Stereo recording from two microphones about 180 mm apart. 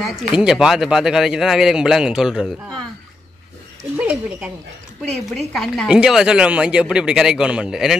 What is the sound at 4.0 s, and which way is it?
Speech, 5° right (ahead or behind).